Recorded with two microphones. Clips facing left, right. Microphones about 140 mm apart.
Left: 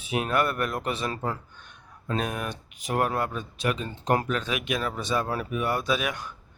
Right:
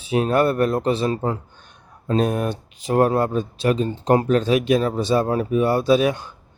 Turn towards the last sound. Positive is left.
turn(degrees=-30)  # may be behind; listen again after turning